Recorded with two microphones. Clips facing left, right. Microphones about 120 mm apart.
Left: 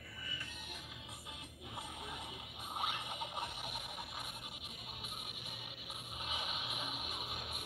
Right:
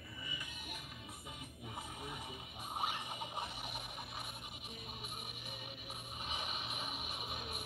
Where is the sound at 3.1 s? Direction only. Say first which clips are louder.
Left 1 dB; centre (ahead or behind).